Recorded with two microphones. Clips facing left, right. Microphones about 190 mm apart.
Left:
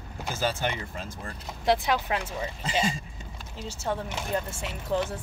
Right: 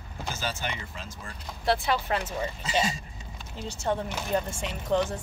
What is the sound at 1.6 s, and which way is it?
Speech, 15° left (ahead or behind).